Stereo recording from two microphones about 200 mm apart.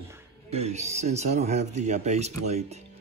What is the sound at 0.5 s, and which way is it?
Speech, 30° right (ahead or behind).